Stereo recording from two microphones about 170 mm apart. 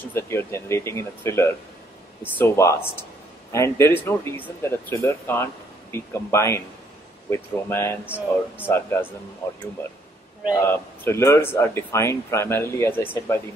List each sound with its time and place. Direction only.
0.1 s speech: 15° left (ahead or behind)
8.0 s speech: 10° right (ahead or behind)
8.6 s speech: 15° left (ahead or behind)
10.5 s speech: 15° left (ahead or behind)